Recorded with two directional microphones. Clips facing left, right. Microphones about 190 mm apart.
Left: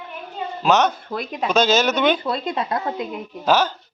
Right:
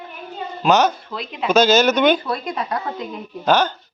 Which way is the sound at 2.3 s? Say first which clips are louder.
Left 1 dB; 25° left (ahead or behind).